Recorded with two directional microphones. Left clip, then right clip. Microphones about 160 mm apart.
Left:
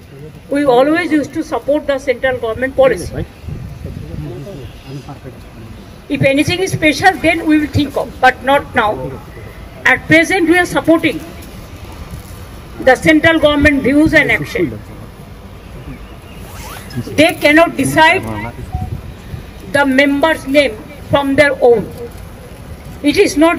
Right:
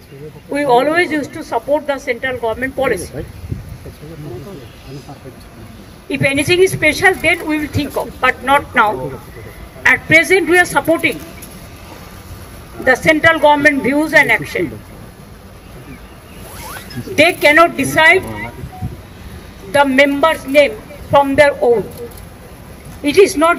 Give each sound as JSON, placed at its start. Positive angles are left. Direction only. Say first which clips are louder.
{"t": 0.5, "sound": "speech", "louder": "left 2 dB", "side_deg": -30}
{"t": 6.1, "sound": "a woman's voice", "louder": "even", "side_deg": -30}
{"t": 12.8, "sound": "speech", "louder": "left 2 dB", "side_deg": -30}
{"t": 17.1, "sound": "speech", "louder": "even", "side_deg": -30}
{"t": 19.7, "sound": "speech", "louder": "even", "side_deg": -25}
{"t": 23.0, "sound": "speech", "louder": "even", "side_deg": -30}